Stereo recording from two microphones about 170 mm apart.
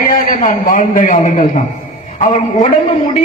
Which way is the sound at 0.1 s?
50° left (ahead or behind).